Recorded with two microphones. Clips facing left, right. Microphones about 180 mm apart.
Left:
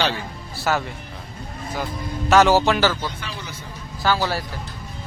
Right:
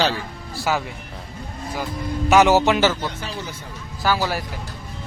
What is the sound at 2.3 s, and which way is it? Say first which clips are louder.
Speech: right 1 dB; 15° right (ahead or behind).